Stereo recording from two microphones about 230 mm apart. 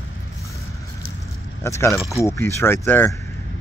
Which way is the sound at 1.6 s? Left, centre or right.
Centre.